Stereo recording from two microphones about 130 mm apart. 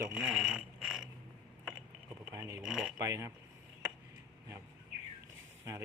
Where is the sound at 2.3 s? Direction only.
25° right (ahead or behind).